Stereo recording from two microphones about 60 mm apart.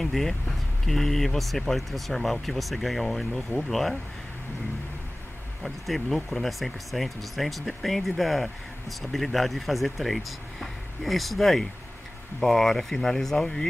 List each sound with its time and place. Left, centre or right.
0.0 s speech: centre
5.6 s speech: centre